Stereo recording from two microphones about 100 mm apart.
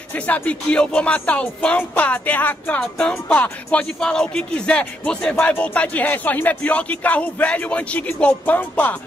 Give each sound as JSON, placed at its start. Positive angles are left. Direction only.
{"t": 0.1, "sound": "speech", "side_deg": 15}